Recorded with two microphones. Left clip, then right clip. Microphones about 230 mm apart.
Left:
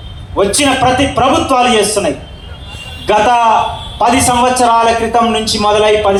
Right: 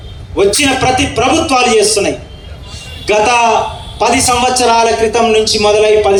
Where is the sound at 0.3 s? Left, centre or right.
Left.